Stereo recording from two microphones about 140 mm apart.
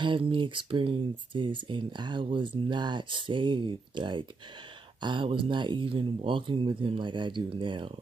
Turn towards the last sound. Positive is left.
turn(degrees=-35)  # may be behind; listen again after turning